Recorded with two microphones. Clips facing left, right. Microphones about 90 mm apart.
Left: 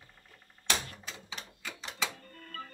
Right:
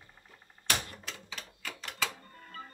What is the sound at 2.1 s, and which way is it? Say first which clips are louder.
Music: left 2 dB; 20° right (ahead or behind).